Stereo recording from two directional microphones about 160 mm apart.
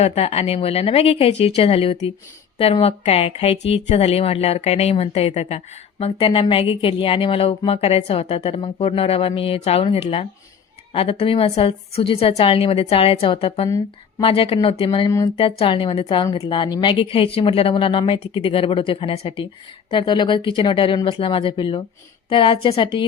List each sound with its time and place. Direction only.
0.0 s speech: 40° left (ahead or behind)